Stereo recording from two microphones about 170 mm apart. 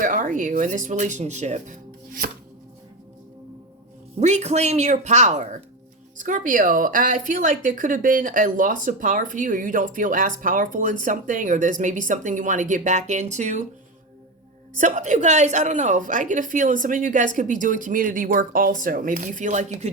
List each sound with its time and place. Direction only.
0.0 s speech: 50° right (ahead or behind)
4.2 s a woman's voice: 40° right (ahead or behind)
14.8 s a woman's voice: 45° right (ahead or behind)